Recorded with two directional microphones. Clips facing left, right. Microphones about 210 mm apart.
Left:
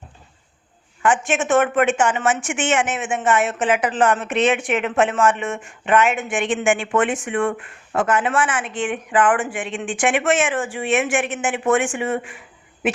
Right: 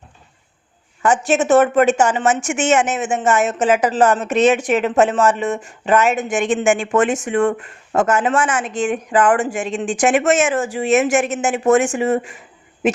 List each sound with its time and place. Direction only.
1.0 s a woman's voice: 40° right (ahead or behind)